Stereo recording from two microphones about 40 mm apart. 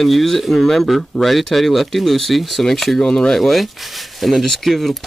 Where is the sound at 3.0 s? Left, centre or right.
Centre.